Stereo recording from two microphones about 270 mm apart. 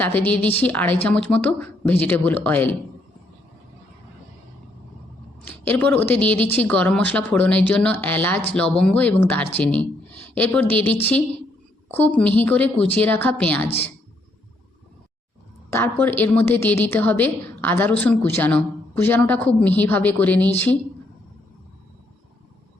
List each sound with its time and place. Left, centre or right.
0.0 s a woman's voice: centre
5.5 s a woman's voice: centre
13.7 s a woman's voice: left
15.7 s a woman's voice: centre